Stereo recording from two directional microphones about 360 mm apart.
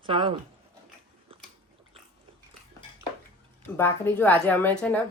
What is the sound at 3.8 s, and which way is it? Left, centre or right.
A woman's voice, centre.